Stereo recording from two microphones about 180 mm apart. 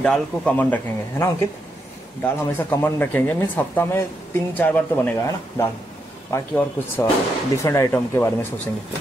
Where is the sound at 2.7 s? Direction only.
10° left (ahead or behind).